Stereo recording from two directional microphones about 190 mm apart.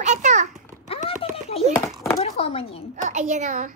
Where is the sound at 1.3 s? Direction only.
30° left (ahead or behind).